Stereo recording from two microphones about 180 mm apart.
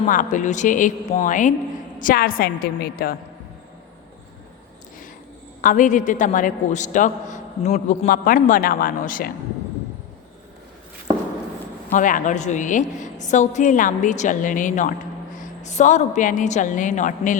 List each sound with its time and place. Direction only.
0.0 s a man's voice: 45° left (ahead or behind)
5.6 s a man's voice: 45° left (ahead or behind)
11.9 s a man's voice: 45° left (ahead or behind)